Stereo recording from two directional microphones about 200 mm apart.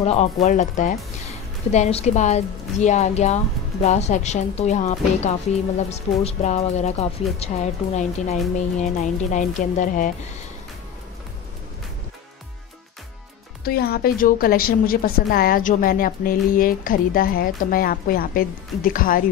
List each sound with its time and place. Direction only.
0.0 s a woman's voice: 35° left (ahead or behind)
13.7 s a woman's voice: 50° left (ahead or behind)